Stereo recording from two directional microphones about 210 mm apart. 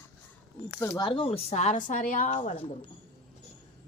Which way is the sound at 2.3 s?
25° left (ahead or behind).